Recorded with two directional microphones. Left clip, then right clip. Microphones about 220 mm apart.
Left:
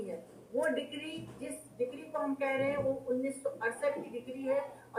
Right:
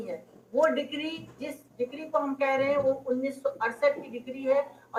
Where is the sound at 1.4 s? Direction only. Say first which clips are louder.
Right 3 dB; 30° right (ahead or behind).